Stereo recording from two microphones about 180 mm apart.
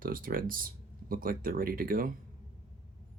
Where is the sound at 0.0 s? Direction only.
50° right (ahead or behind).